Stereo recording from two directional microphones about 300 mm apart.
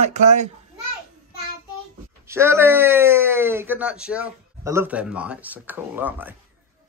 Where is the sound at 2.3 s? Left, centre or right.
Centre.